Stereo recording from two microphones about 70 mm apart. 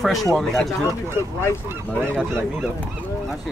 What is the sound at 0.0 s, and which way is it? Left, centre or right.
Speech, centre.